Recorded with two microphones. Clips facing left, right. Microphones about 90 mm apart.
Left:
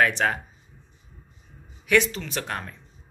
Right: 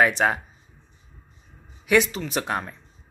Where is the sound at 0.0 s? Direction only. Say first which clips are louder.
Right 2 dB; 15° right (ahead or behind).